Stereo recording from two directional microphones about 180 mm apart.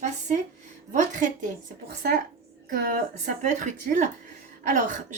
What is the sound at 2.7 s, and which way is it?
A woman's voice, 50° right (ahead or behind).